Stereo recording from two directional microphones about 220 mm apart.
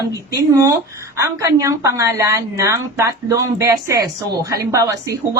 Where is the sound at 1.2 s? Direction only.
15° right (ahead or behind).